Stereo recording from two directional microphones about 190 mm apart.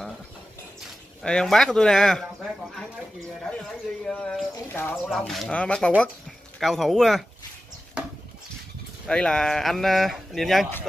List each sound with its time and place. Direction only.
1.2 s speech: 5° left (ahead or behind)
9.0 s speech: 5° left (ahead or behind)